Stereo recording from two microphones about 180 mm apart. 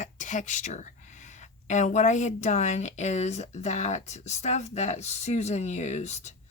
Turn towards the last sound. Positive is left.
turn(degrees=40)  # may be behind; listen again after turning